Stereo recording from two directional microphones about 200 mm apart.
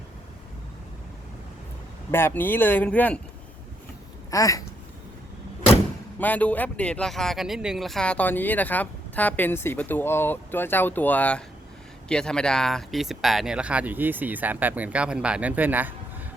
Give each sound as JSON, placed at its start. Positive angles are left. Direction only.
{"t": 2.0, "sound": "speech", "side_deg": 10}
{"t": 4.3, "sound": "speech", "side_deg": 15}
{"t": 6.1, "sound": "speech", "side_deg": 10}